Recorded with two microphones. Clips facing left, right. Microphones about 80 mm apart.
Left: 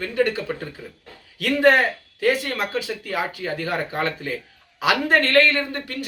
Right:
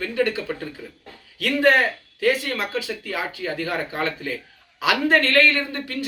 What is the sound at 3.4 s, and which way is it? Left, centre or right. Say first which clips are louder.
Speech: even; left.